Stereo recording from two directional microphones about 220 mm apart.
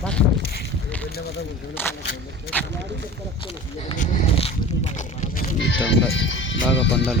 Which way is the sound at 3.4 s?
25° left (ahead or behind).